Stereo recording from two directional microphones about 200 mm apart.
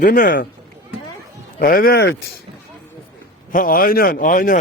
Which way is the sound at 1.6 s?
45° left (ahead or behind).